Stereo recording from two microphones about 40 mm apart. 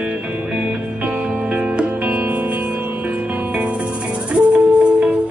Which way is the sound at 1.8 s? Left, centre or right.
Right.